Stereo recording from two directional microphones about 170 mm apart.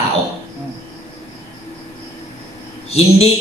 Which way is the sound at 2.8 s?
35° left (ahead or behind).